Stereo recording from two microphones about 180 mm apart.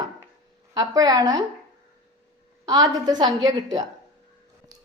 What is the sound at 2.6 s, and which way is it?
A woman's voice, 20° right (ahead or behind).